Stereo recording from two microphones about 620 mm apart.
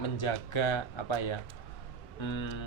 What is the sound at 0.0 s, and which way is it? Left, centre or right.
Speech, left.